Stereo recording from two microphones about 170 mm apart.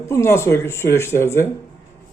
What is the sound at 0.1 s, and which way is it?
A woman's voice, 15° left (ahead or behind).